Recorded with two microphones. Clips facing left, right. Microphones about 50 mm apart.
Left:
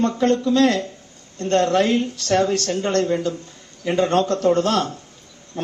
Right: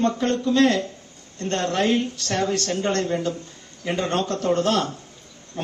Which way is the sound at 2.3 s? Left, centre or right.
Left.